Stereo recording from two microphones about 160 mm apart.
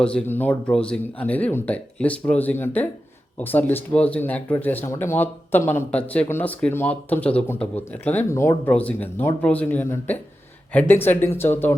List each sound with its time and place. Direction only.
0.0 s speech: 5° left (ahead or behind)